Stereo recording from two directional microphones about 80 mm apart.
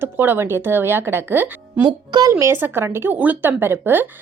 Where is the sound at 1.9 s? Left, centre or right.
Right.